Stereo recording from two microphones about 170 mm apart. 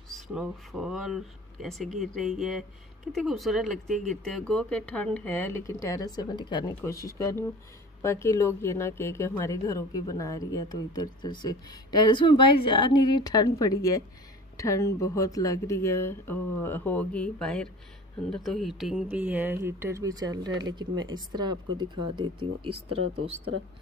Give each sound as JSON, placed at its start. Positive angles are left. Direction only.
{"t": 0.3, "sound": "speech", "side_deg": -5}